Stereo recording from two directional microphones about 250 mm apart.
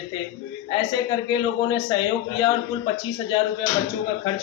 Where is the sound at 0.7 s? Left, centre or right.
Centre.